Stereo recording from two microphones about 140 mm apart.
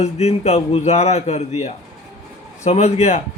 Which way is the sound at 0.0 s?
50° left (ahead or behind).